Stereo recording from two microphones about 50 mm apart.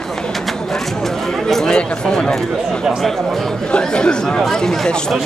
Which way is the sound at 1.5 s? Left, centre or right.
Centre.